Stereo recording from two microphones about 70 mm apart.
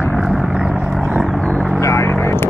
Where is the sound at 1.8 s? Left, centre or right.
Left.